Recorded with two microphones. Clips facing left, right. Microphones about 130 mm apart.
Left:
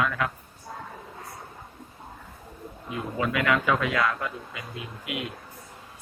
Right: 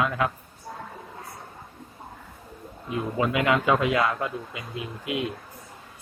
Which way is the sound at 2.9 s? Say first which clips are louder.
Right 3 dB; 25° right (ahead or behind).